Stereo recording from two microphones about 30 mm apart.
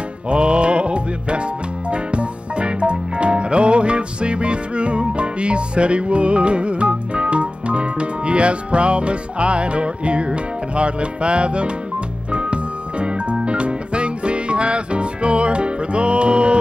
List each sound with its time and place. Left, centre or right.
0.3 s music: right